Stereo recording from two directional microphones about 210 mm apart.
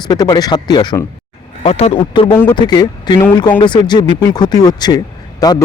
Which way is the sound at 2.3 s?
10° left (ahead or behind).